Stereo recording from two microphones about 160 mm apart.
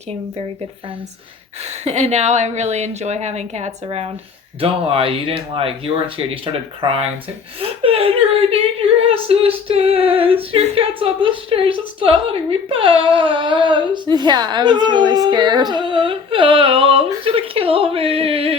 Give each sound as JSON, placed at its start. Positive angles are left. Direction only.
{"t": 1.8, "sound": "a woman's voice", "side_deg": -45}